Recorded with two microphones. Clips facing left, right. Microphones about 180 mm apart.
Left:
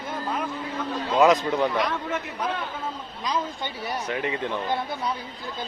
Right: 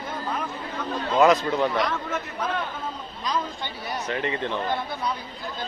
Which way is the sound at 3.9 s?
10° left (ahead or behind).